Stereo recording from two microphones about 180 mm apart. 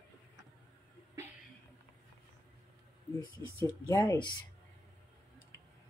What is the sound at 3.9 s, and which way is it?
Speech, 20° left (ahead or behind).